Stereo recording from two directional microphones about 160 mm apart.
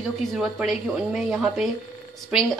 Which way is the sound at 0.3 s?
Centre (ahead or behind).